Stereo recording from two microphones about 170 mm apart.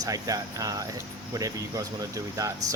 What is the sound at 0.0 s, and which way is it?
Speech, 20° right (ahead or behind).